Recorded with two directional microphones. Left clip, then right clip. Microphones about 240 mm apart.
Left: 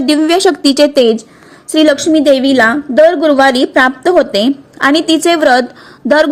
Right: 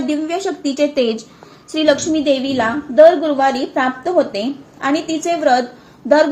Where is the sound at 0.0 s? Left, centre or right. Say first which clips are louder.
Left 10 dB; left.